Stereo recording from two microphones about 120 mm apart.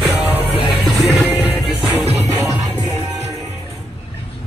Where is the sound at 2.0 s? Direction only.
60° right (ahead or behind).